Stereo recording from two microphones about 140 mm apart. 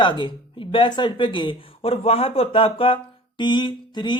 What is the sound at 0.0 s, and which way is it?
Speech, 35° left (ahead or behind).